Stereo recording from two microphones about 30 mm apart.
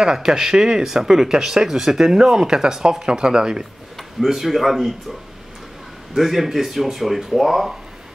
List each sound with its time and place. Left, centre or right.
0.0 s speech: centre
2.3 s speech: right
4.3 s speech: centre
6.1 s speech: centre